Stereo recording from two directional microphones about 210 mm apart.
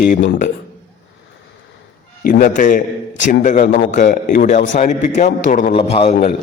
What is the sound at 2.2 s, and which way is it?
A man's voice, 40° left (ahead or behind).